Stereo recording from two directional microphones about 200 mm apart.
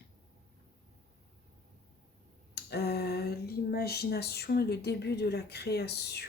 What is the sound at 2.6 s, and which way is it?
Speech, 55° left (ahead or behind).